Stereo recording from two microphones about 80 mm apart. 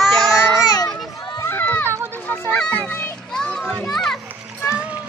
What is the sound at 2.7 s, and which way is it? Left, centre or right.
Music, left.